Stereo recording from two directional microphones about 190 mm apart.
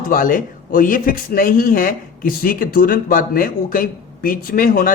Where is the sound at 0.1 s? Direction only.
45° left (ahead or behind).